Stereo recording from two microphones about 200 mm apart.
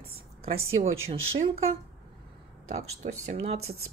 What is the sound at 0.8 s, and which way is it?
Speech, 35° right (ahead or behind).